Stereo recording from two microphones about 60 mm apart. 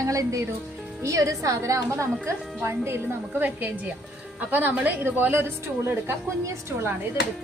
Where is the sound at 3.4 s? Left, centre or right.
Right.